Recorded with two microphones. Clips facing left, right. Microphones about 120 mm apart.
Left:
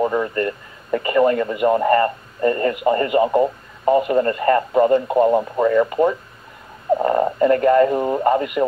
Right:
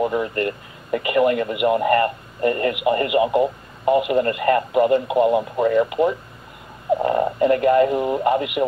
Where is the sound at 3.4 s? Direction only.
5° right (ahead or behind).